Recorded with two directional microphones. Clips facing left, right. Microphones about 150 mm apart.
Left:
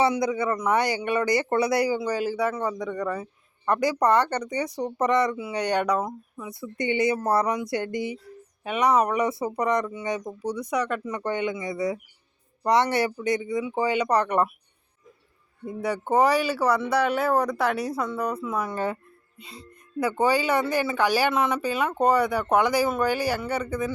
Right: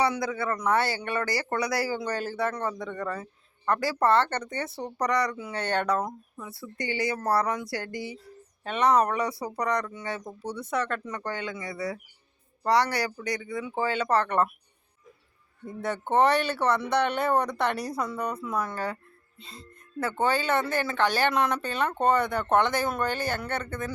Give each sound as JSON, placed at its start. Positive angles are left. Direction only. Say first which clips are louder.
{"t": 0.0, "sound": "speech", "louder": "left 4 dB", "side_deg": 20}
{"t": 2.0, "sound": "speech", "louder": "left 4 dB", "side_deg": 10}
{"t": 5.4, "sound": "speech", "louder": "left 4 dB", "side_deg": 10}
{"t": 6.1, "sound": "speech", "louder": "left 3 dB", "side_deg": 0}
{"t": 6.5, "sound": "speech", "louder": "left 6 dB", "side_deg": 20}
{"t": 9.2, "sound": "speech", "louder": "left 4 dB", "side_deg": 20}
{"t": 15.6, "sound": "speech", "louder": "left 3 dB", "side_deg": 10}
{"t": 18.7, "sound": "speech", "louder": "left 4 dB", "side_deg": 20}